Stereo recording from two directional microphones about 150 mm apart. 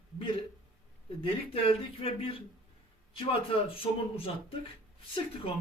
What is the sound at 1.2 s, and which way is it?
Speech, 40° left (ahead or behind).